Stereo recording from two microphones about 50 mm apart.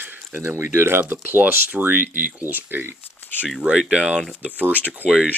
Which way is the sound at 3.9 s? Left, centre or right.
Centre.